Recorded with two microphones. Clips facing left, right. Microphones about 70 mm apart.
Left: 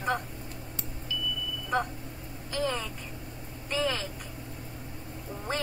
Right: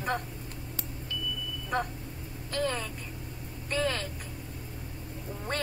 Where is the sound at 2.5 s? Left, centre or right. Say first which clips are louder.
Even; centre.